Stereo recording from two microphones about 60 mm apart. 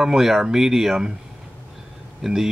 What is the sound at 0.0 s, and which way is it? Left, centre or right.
Speech, centre.